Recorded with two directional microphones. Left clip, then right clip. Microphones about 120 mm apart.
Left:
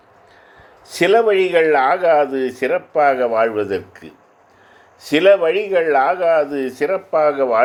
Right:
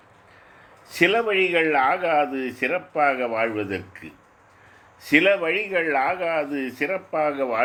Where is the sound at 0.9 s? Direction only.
35° left (ahead or behind).